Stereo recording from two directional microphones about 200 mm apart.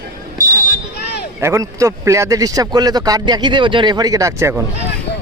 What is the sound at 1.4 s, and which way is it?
Speech, 15° right (ahead or behind).